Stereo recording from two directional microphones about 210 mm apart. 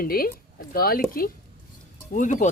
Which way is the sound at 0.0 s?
45° left (ahead or behind).